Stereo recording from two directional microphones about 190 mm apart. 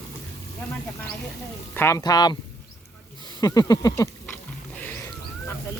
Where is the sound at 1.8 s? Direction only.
15° left (ahead or behind).